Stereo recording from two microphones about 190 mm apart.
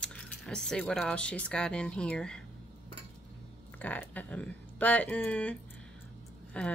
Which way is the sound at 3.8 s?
10° left (ahead or behind).